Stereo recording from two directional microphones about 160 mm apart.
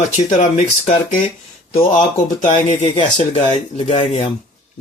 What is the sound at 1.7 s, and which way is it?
Speech, 40° left (ahead or behind).